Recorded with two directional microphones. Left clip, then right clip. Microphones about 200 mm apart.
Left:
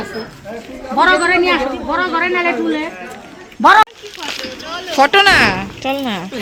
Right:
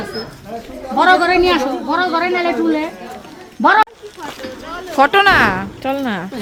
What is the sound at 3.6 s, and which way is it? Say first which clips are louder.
Speech: left 3 dB; 10° right (ahead or behind).